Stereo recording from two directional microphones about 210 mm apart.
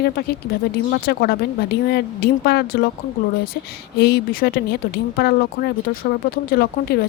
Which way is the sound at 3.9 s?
50° left (ahead or behind).